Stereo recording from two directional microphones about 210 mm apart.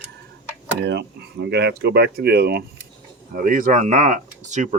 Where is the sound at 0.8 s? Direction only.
50° right (ahead or behind).